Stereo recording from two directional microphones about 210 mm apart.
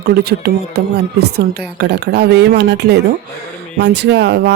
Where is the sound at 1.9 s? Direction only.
55° right (ahead or behind).